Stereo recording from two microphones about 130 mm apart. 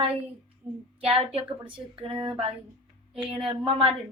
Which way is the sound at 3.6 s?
40° right (ahead or behind).